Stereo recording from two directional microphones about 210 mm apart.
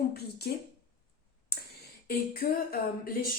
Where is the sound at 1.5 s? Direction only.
50° left (ahead or behind).